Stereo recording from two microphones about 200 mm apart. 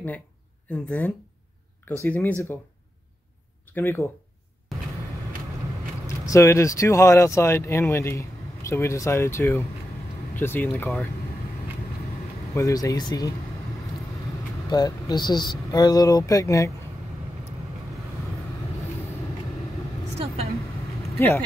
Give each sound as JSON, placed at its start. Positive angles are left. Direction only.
{"t": 0.7, "sound": "speech", "side_deg": 5}
{"t": 3.7, "sound": "speech", "side_deg": 10}
{"t": 6.0, "sound": "speech", "side_deg": 15}
{"t": 12.5, "sound": "speech", "side_deg": 15}
{"t": 14.7, "sound": "speech", "side_deg": 20}